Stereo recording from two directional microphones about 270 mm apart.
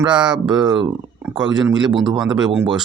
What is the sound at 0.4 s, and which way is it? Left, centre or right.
Speech, centre.